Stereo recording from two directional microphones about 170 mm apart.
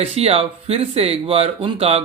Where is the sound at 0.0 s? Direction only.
35° right (ahead or behind).